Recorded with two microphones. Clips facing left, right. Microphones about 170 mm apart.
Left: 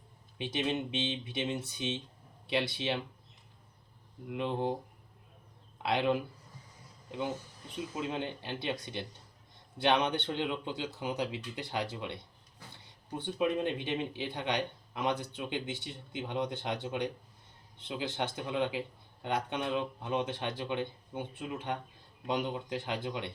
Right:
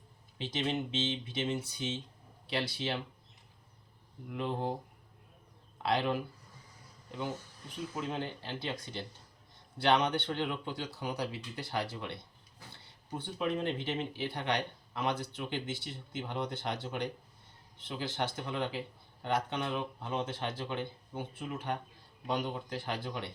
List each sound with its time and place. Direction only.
0.3 s speech: 15° left (ahead or behind)
4.3 s speech: 20° left (ahead or behind)
5.8 s speech: 20° left (ahead or behind)
7.7 s speech: 20° left (ahead or behind)